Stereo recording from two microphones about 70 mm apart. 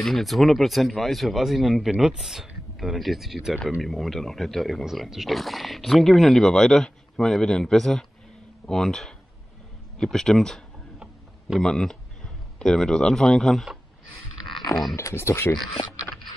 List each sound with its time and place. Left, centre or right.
0.0 s speech: centre
11.0 s a sound: centre
11.6 s speech: centre
14.7 s speech: centre
15.0 s speech: left
15.5 s speech: centre